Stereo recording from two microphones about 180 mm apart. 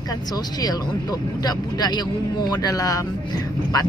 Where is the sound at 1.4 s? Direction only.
25° left (ahead or behind).